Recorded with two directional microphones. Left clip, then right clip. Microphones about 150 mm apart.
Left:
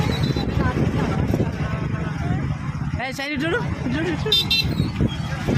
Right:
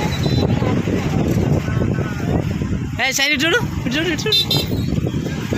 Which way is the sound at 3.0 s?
35° right (ahead or behind).